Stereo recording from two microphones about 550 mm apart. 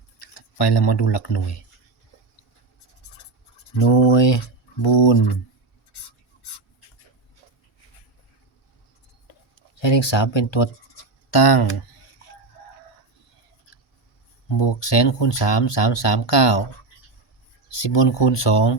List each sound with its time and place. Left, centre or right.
0.3 s speech: left
3.8 s speech: left
9.8 s speech: left
14.5 s speech: left
17.8 s speech: left